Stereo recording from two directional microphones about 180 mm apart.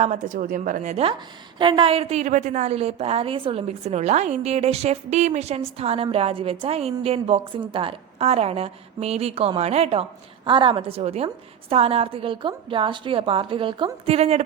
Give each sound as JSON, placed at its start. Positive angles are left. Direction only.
{"t": 0.0, "sound": "a woman's voice", "side_deg": -45}
{"t": 1.5, "sound": "a woman's voice", "side_deg": -25}